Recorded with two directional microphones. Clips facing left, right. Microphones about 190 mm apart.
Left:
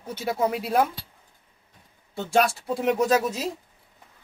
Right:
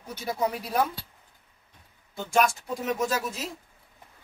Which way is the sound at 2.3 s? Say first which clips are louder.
Left 2 dB; 30° left (ahead or behind).